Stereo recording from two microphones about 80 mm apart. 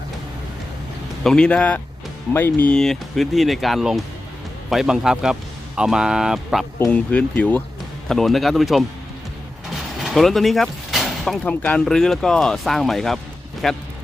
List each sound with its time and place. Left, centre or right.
1.2 s speech: centre; by 2.7 s left
2.7 s a man's voice: centre
6.9 s speech: centre
8.0 s speech: centre
10.0 s a sound: centre
11.4 s speech: centre
11.9 s speech: centre